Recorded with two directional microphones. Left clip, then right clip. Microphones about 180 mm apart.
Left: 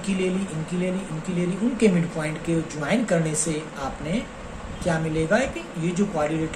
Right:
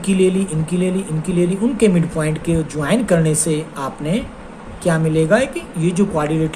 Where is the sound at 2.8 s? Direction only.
65° right (ahead or behind).